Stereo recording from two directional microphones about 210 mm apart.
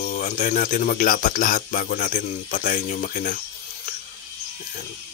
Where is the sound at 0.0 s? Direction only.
35° left (ahead or behind).